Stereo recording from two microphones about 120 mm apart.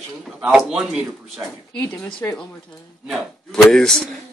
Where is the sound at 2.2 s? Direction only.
20° left (ahead or behind).